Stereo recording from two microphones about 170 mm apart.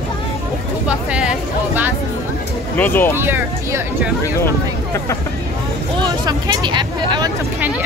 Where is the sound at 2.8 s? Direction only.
15° left (ahead or behind).